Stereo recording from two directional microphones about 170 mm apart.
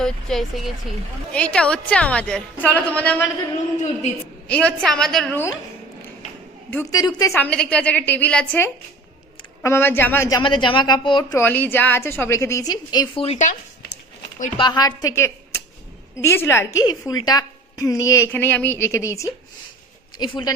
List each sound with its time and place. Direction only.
0.0 s a woman's voice: centre (ahead or behind)
4.4 s a woman's voice: 5° left (ahead or behind)
6.7 s a woman's voice: 10° left (ahead or behind)
7.0 s a woman's voice: 20° left (ahead or behind)
13.2 s speech: 45° left (ahead or behind)
14.6 s a woman's voice: 25° left (ahead or behind)